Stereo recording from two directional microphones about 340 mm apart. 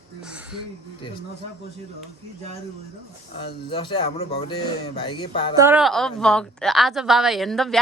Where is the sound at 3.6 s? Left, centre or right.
Centre.